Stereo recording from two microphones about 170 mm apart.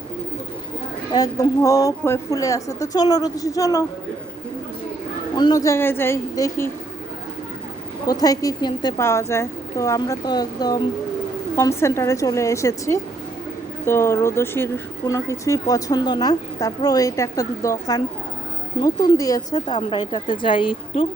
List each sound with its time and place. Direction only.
1.1 s speech: 20° left (ahead or behind)
5.4 s a woman's voice: 20° left (ahead or behind)
8.0 s a woman's voice: 20° left (ahead or behind)